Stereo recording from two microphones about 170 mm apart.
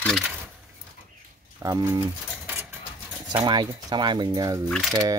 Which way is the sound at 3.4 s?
25° right (ahead or behind).